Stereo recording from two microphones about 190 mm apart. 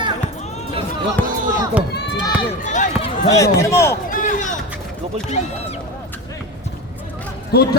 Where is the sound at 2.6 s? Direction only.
40° left (ahead or behind).